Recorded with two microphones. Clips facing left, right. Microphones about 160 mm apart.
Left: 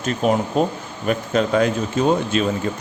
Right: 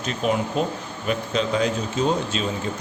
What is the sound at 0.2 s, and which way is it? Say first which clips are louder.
Speech: left 4 dB; 45° left (ahead or behind).